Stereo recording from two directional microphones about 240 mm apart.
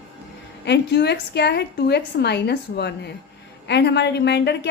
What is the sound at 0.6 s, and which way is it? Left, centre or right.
A woman's voice, left.